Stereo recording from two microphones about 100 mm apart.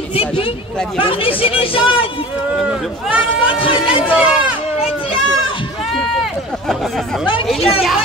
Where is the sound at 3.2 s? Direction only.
60° left (ahead or behind).